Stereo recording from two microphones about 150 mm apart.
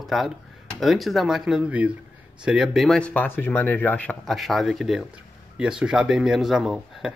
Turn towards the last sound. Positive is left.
turn(degrees=-5)  # may be behind; listen again after turning